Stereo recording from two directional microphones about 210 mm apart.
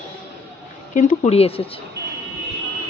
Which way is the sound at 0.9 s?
35° left (ahead or behind).